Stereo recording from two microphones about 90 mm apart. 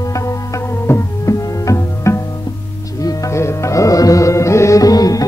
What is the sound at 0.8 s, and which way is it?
Music, 35° left (ahead or behind).